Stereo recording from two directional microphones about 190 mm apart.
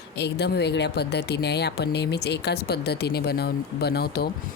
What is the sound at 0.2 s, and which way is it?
Speech, 60° left (ahead or behind).